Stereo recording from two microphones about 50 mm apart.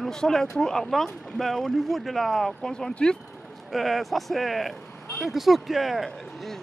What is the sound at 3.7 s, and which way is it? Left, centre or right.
A man's voice, centre.